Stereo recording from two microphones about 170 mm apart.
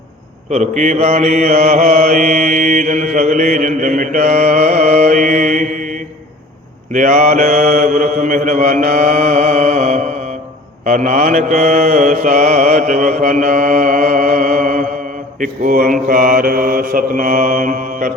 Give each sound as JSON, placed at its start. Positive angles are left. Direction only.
{"t": 0.5, "sound": "mantra", "side_deg": -45}